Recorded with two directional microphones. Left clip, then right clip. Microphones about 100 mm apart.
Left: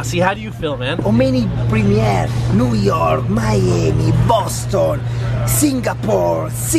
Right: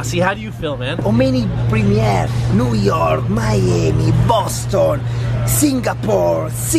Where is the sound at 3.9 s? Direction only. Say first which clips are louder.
Even; 30° left (ahead or behind).